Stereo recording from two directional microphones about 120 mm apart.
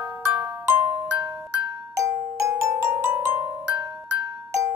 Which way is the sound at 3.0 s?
15° right (ahead or behind).